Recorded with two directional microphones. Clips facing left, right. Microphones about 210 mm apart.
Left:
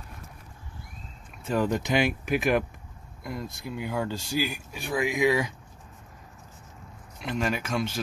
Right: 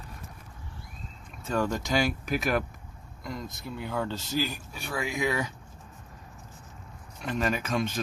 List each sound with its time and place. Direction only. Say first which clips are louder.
1.5 s speech: left 2 dB; 15° left (ahead or behind)
3.6 s speech: left 2 dB; 10° left (ahead or behind)
7.2 s speech: even; 10° left (ahead or behind)